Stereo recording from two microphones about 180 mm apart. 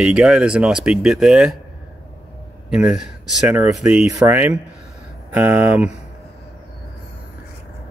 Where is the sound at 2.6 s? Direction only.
5° right (ahead or behind).